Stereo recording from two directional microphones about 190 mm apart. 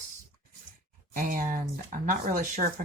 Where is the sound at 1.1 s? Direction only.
45° right (ahead or behind).